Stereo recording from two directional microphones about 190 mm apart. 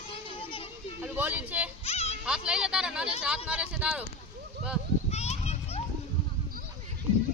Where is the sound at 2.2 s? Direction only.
5° right (ahead or behind).